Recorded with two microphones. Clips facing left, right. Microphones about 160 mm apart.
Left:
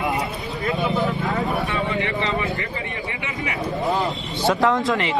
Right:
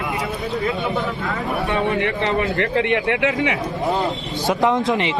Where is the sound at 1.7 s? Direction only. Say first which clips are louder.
Right 4 dB; 60° right (ahead or behind); by 3.5 s 90° right.